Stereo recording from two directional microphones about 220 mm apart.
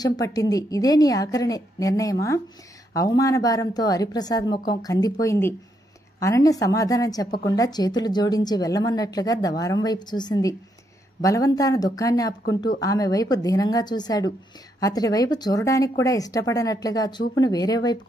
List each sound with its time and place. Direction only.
0.0 s a woman's voice: 15° left (ahead or behind)